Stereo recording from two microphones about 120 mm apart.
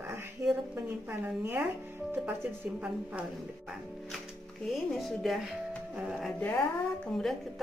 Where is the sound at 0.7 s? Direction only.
15° right (ahead or behind).